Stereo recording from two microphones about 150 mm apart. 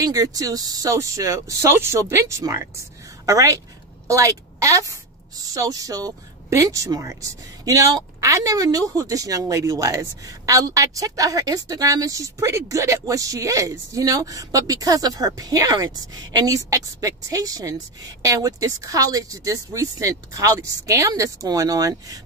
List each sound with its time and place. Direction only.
0.0 s a woman's voice: 25° right (ahead or behind)